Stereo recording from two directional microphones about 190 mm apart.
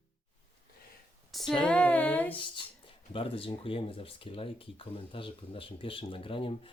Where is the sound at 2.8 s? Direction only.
30° left (ahead or behind).